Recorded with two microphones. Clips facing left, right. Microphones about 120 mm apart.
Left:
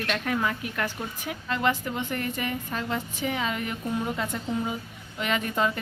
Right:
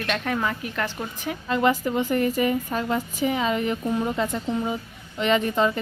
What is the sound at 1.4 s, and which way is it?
A woman's voice, 5° right (ahead or behind).